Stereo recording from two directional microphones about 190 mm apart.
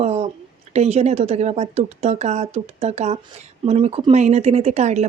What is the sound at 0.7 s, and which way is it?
A woman's voice, 35° right (ahead or behind).